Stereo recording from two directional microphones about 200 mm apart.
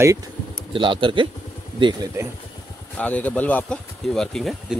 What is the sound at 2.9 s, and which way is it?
Speech, 5° left (ahead or behind).